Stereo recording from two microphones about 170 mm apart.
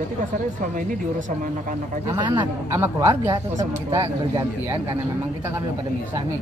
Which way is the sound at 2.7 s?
15° right (ahead or behind).